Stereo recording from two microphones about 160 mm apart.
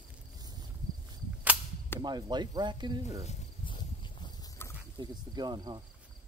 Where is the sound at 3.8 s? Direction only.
30° left (ahead or behind).